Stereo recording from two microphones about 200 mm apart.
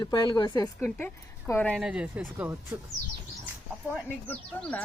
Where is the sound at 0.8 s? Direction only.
5° left (ahead or behind).